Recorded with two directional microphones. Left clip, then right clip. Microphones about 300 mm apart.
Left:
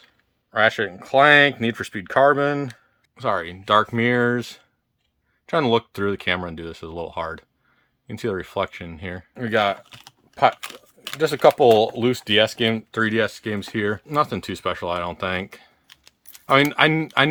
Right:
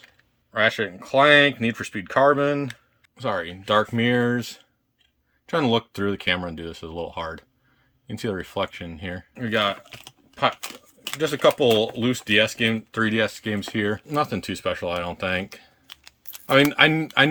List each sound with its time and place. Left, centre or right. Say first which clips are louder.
0.5 s speech: left 2 dB; centre
10.6 s a sound: even; centre
11.2 s speech: left 4 dB; centre